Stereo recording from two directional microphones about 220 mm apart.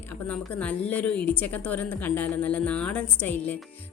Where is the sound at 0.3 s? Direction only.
5° left (ahead or behind).